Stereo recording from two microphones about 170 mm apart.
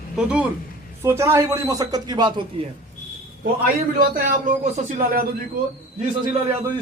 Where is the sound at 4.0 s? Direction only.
60° right (ahead or behind).